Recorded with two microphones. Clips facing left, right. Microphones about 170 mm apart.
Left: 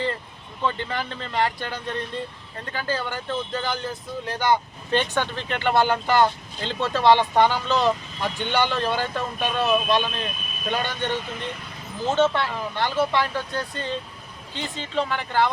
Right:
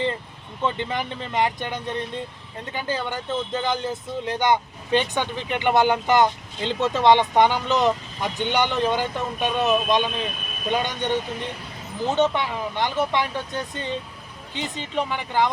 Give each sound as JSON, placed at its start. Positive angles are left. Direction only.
{"t": 0.6, "sound": "speech", "side_deg": -20}